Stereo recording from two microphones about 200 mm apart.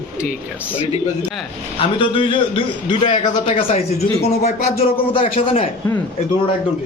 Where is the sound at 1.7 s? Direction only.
25° left (ahead or behind).